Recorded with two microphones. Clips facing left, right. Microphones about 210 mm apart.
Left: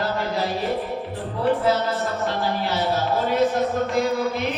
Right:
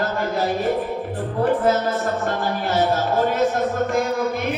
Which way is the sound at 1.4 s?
50° right (ahead or behind).